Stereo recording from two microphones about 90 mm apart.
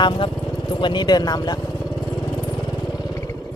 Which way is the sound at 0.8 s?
55° left (ahead or behind).